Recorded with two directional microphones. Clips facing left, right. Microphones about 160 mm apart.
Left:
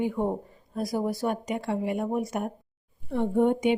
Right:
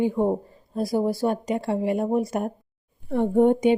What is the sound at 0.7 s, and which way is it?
Speech, 30° right (ahead or behind).